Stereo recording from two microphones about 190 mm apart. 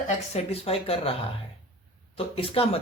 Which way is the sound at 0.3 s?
30° left (ahead or behind).